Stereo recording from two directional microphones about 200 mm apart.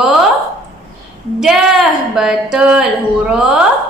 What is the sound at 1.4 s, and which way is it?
A woman's voice, centre (ahead or behind).